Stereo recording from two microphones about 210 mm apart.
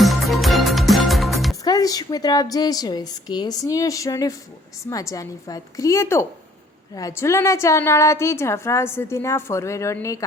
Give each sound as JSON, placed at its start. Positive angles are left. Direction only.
{"t": 0.0, "sound": "music", "side_deg": 0}
{"t": 1.6, "sound": "a woman's voice", "side_deg": 15}